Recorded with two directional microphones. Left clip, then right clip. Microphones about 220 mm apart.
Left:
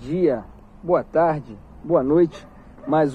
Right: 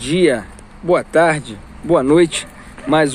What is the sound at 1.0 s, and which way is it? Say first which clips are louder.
Speech: right 6 dB; 30° right (ahead or behind).